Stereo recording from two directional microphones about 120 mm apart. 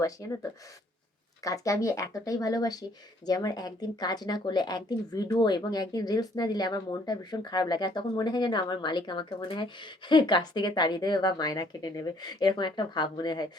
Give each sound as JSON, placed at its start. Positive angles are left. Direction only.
{"t": 0.2, "sound": "speech", "side_deg": 30}
{"t": 1.5, "sound": "speech", "side_deg": 25}